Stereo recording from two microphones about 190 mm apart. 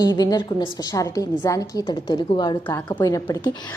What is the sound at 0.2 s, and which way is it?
A woman's voice, 20° left (ahead or behind).